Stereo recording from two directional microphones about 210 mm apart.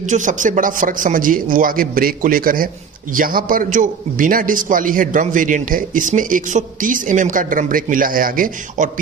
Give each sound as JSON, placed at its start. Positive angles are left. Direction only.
{"t": 0.1, "sound": "a man's voice", "side_deg": -35}